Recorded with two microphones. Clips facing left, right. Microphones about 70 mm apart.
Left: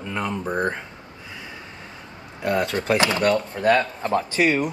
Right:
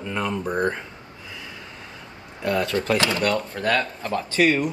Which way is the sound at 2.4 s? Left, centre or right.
Left.